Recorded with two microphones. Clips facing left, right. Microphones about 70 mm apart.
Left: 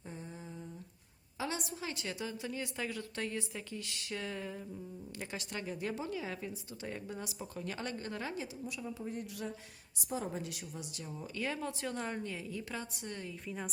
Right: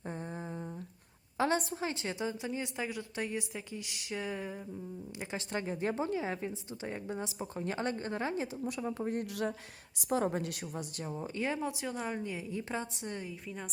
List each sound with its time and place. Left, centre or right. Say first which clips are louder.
1.4 s a woman's voice: right 8 dB; right; by 4.6 s centre
5.5 s a woman's voice: right 6 dB; right
8.6 s speech: right 6 dB; right
10.0 s a woman's voice: right 7 dB; right
11.3 s a woman's voice: right 3 dB; right
11.8 s a woman's voice: right 2 dB; centre